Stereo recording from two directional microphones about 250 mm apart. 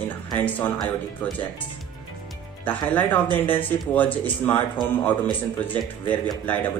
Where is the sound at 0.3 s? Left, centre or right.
Centre.